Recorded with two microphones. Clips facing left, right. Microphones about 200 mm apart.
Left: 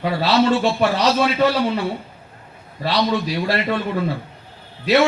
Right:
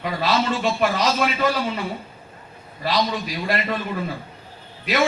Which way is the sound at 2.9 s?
70° left (ahead or behind).